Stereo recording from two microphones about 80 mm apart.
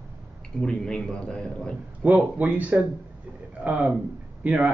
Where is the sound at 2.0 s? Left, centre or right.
Centre.